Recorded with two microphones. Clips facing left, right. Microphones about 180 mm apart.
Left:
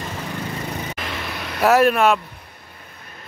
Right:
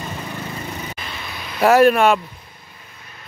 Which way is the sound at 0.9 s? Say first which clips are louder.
Left 4 dB; 80° left.